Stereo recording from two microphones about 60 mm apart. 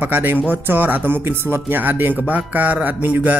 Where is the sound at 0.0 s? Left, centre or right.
Right.